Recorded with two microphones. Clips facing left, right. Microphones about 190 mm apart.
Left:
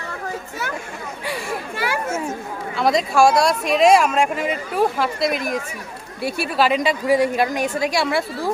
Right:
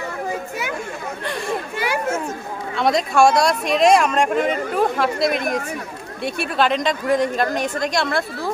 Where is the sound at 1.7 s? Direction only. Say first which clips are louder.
Left 1 dB; 20° right (ahead or behind).